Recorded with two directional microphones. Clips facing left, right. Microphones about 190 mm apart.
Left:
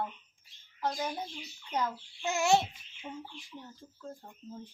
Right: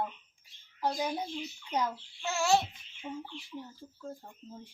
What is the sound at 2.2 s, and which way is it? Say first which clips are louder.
Babbling: left 1 dB; 20° left (ahead or behind).